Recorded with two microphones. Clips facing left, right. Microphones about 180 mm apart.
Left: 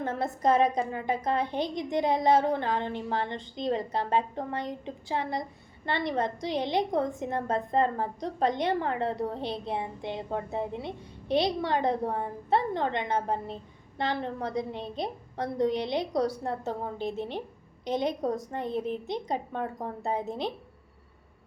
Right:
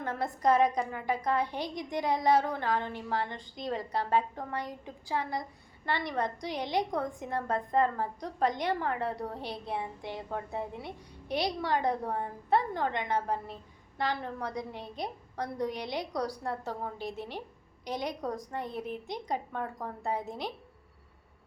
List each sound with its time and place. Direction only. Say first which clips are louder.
0.0 s a woman's voice: left 2 dB; 25° left (ahead or behind)